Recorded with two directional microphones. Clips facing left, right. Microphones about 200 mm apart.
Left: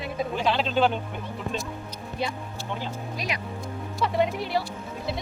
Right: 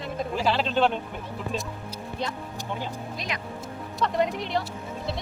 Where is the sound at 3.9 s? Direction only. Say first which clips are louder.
Left 1 dB; 5° left (ahead or behind).